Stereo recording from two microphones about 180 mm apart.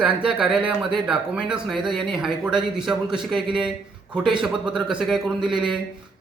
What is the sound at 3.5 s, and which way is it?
Speech, 25° right (ahead or behind).